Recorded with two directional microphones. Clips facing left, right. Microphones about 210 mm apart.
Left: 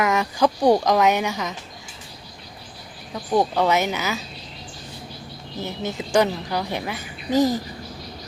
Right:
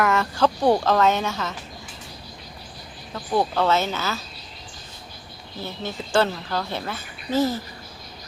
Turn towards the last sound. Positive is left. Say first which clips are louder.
# left 3 dB
turn(degrees=15)  # may be behind; listen again after turning